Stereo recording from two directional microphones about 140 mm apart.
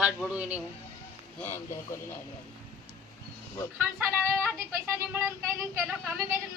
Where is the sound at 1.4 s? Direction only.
20° left (ahead or behind).